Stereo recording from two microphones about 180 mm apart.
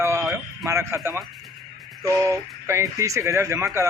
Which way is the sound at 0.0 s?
15° right (ahead or behind).